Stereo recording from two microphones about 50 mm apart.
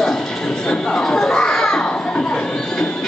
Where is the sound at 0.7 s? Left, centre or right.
Centre.